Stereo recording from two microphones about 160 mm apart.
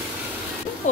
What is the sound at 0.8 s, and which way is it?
Speech, 50° left (ahead or behind).